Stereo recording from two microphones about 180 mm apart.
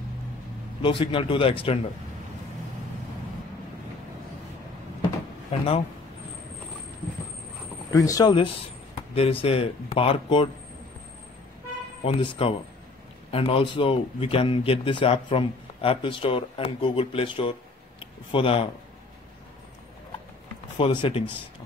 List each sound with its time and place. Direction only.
0.8 s speech: 30° left (ahead or behind)
5.5 s a man's voice: 35° left (ahead or behind)
7.9 s speech: 20° left (ahead or behind)
9.1 s a man's voice: 30° left (ahead or behind)
12.0 s a man's voice: 30° left (ahead or behind)
20.7 s a man's voice: 30° left (ahead or behind)